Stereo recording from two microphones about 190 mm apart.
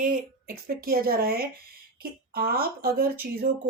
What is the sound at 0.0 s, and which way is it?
A woman's voice, 45° right (ahead or behind).